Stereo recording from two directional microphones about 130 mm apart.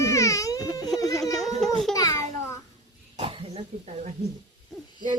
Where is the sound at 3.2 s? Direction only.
45° right (ahead or behind).